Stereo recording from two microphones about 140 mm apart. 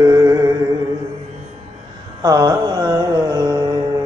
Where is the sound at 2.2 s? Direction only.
25° right (ahead or behind).